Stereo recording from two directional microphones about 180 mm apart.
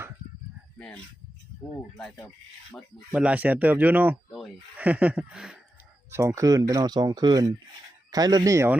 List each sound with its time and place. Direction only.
0.8 s speech: 5° left (ahead or behind)
3.1 s speech: 5° right (ahead or behind)
4.3 s sheep: centre (ahead or behind)
4.8 s speech: 10° right (ahead or behind)
6.1 s speech: 15° right (ahead or behind)